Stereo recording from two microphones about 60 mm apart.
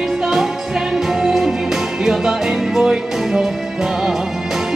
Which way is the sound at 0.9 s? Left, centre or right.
Centre.